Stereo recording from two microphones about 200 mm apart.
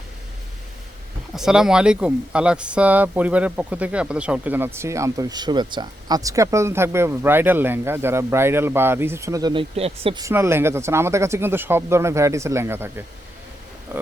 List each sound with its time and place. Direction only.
1.4 s speech: centre (ahead or behind); by 10.2 s 30° right (ahead or behind)
10.2 s speech: 15° right (ahead or behind)